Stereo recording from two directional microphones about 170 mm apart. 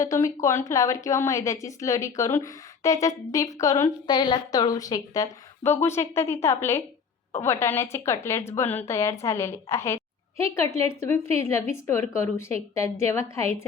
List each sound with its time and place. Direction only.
0.0 s a woman's voice: 20° left (ahead or behind)